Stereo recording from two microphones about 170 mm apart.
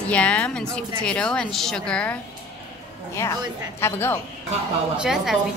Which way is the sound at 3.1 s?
15° left (ahead or behind).